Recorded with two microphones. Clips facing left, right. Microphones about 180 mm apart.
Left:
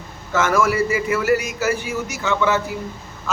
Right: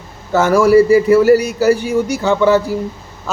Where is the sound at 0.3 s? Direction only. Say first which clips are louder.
Right 9 dB; 35° right (ahead or behind).